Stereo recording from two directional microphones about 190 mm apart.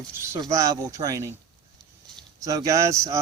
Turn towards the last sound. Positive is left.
turn(degrees=-15)  # may be behind; listen again after turning